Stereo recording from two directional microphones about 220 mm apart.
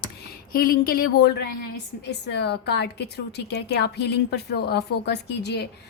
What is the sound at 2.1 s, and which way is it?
Speech, 50° left (ahead or behind).